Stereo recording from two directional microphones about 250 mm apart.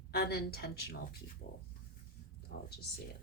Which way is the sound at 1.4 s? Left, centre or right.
Left.